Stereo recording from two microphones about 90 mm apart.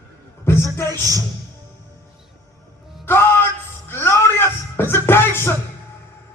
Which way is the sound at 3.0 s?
25° left (ahead or behind).